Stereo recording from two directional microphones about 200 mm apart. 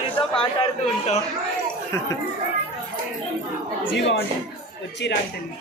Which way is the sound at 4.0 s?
60° left (ahead or behind).